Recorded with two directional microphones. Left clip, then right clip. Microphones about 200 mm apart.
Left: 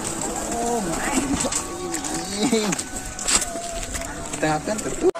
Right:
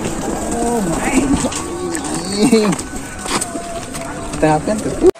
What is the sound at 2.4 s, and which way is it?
Speech, 25° right (ahead or behind).